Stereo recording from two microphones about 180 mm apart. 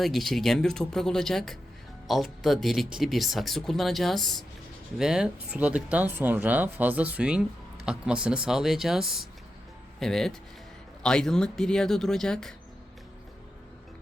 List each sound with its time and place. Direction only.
0.0 s speech: centre (ahead or behind)